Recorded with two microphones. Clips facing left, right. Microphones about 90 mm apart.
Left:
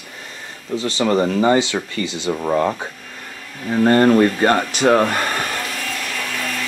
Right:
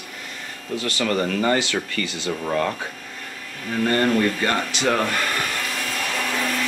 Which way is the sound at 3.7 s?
35° left (ahead or behind).